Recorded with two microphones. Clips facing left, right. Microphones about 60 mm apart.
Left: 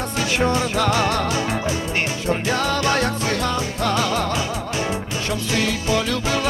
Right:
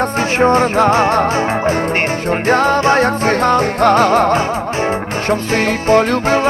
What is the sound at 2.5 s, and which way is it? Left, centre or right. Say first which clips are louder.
Music: right 10 dB; right.